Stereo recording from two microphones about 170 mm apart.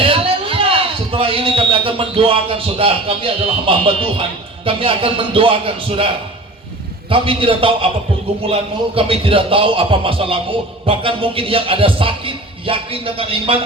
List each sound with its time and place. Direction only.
0.0 s speech: 30° right (ahead or behind)
7.1 s speech: 30° right (ahead or behind)
9.0 s speech: 30° right (ahead or behind)